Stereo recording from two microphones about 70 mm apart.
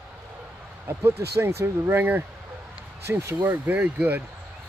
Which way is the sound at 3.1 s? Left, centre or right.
Right.